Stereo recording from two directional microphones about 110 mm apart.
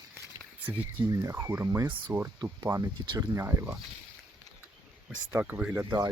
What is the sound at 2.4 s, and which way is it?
Speech, 35° right (ahead or behind).